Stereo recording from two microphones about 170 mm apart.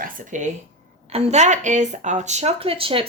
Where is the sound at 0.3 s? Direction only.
45° right (ahead or behind).